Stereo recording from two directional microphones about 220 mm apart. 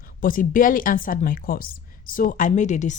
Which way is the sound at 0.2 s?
40° left (ahead or behind).